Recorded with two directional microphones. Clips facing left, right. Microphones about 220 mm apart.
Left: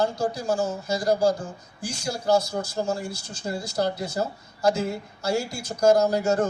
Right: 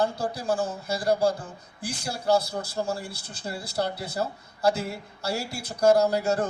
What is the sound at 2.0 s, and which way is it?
A man's voice, 35° right (ahead or behind).